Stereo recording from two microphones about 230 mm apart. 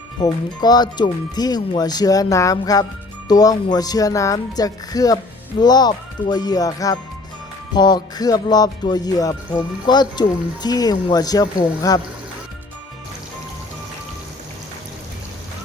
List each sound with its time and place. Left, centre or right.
0.2 s music: centre